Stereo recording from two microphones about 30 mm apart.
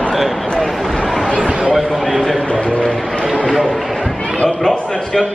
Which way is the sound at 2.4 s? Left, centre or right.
Left.